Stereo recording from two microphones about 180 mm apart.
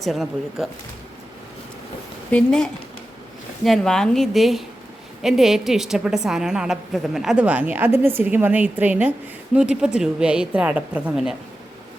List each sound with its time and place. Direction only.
0.0 s a woman's voice: centre (ahead or behind)
2.3 s a woman's voice: 5° left (ahead or behind)